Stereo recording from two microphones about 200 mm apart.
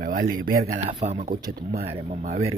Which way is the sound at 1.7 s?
30° right (ahead or behind).